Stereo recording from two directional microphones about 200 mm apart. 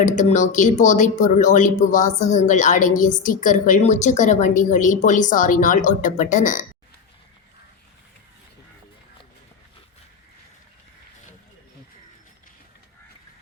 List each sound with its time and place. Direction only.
0.0 s speech: 40° left (ahead or behind)